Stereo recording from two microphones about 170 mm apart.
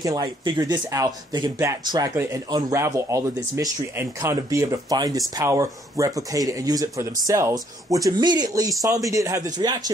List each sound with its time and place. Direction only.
0.0 s speech: 20° right (ahead or behind)